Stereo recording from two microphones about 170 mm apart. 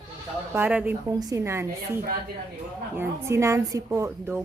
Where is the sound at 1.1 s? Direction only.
20° right (ahead or behind).